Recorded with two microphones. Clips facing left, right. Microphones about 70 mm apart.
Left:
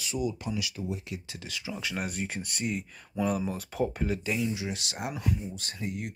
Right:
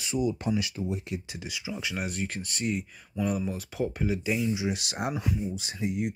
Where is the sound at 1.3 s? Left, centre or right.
Centre.